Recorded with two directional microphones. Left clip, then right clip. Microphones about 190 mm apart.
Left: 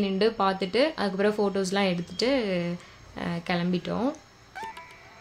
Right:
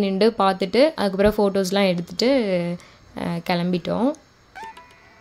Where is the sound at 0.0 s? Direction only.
40° right (ahead or behind).